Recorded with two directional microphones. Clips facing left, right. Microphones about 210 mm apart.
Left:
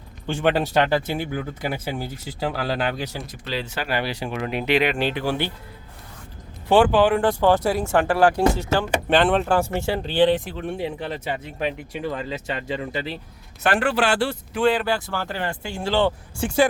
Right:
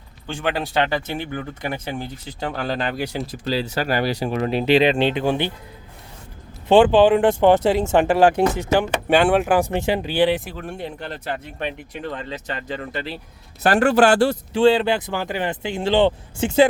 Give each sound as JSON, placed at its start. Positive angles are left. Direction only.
{"t": 1.0, "sound": "speech", "side_deg": 10}
{"t": 3.0, "sound": "speech", "side_deg": -15}
{"t": 3.4, "sound": "speech", "side_deg": -35}
{"t": 6.7, "sound": "speech", "side_deg": -20}
{"t": 13.6, "sound": "speech", "side_deg": -40}
{"t": 14.5, "sound": "speech", "side_deg": -25}